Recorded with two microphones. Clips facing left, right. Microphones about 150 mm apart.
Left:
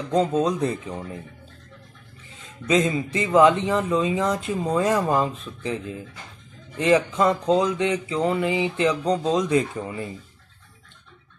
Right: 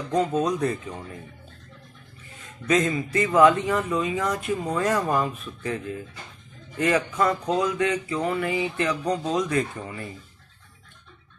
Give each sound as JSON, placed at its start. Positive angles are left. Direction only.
{"t": 0.1, "sound": "speech", "side_deg": 25}
{"t": 2.6, "sound": "speech", "side_deg": 20}